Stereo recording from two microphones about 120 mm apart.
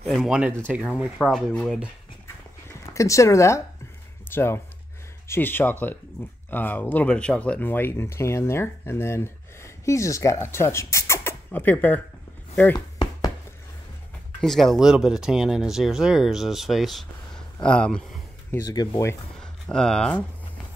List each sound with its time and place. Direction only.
0.0 s speech: centre (ahead or behind)
1.1 s speech: 5° left (ahead or behind)
2.9 s speech: 25° left (ahead or behind)
12.7 s chopping: 35° left (ahead or behind)
14.4 s speech: centre (ahead or behind)
18.5 s speech: 30° left (ahead or behind)
19.4 s speech: 5° left (ahead or behind)